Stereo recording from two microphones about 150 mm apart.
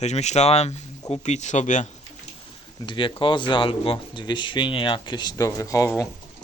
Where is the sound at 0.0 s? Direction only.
50° left (ahead or behind).